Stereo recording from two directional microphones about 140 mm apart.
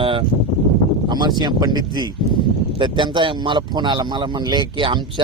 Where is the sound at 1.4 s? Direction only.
30° right (ahead or behind).